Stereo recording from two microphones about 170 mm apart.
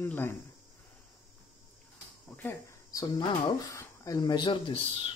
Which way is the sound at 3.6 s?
20° left (ahead or behind).